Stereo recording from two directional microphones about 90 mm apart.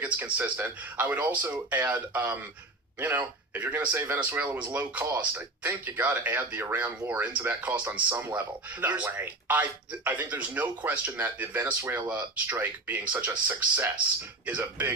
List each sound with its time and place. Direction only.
0.0 s speech: 20° right (ahead or behind)